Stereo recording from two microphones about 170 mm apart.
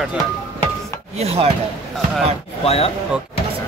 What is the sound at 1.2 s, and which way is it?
Chopping, 35° right (ahead or behind).